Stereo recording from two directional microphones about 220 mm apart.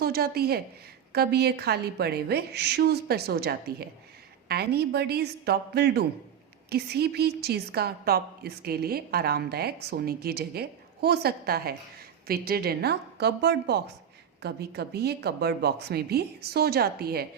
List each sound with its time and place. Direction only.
0.0 s a woman's voice: 45° right (ahead or behind)